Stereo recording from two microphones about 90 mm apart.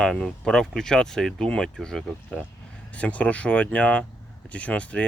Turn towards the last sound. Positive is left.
turn(degrees=15)  # may be behind; listen again after turning